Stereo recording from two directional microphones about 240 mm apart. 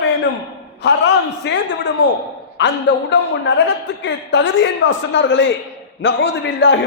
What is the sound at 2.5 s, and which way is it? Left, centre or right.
A man's voice, left.